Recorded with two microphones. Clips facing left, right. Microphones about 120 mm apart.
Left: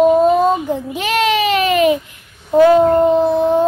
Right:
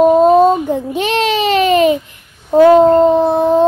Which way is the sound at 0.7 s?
30° right (ahead or behind).